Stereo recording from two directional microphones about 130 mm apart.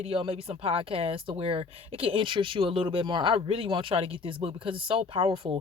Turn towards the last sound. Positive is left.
turn(degrees=-45)  # may be behind; listen again after turning